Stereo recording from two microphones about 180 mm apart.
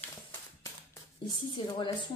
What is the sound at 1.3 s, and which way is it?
Speech, 30° left (ahead or behind).